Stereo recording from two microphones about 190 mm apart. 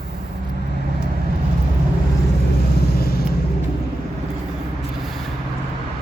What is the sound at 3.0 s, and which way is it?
Vehicle, 55° left (ahead or behind).